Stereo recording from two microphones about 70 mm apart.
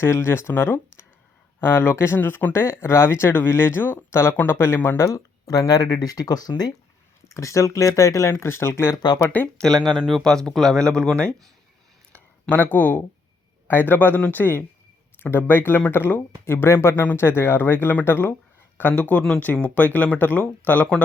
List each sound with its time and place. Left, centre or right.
0.0 s speech: left
5.0 s speech: left
7.3 s speech: left
9.6 s speech: centre
12.1 s a sound: left
13.7 s speech: left